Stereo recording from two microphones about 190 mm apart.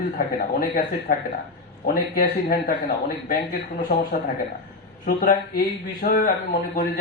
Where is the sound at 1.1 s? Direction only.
50° left (ahead or behind).